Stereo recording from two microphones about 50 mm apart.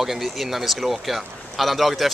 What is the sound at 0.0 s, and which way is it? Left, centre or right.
Speech, centre.